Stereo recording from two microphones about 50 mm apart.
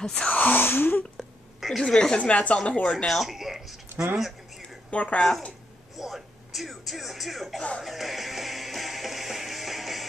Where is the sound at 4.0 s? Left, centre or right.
Right.